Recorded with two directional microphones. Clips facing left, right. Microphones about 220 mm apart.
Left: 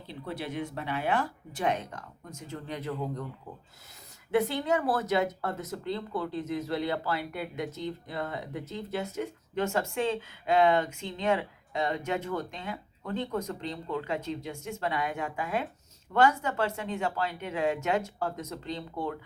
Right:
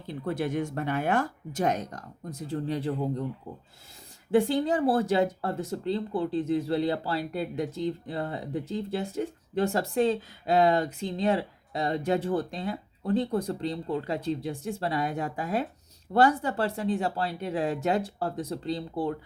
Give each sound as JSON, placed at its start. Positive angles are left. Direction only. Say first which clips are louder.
{"t": 0.1, "sound": "speech", "louder": "right 7 dB", "side_deg": -50}
{"t": 4.3, "sound": "speech", "louder": "right 3 dB", "side_deg": -30}